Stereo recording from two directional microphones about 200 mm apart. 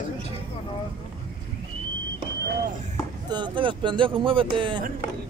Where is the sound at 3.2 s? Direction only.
20° right (ahead or behind).